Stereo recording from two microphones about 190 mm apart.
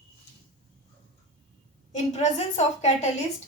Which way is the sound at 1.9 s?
35° left (ahead or behind).